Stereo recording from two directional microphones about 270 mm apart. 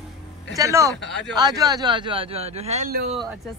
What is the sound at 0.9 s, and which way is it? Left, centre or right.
Speech, left.